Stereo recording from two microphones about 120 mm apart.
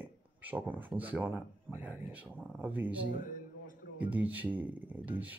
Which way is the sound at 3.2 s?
90° left.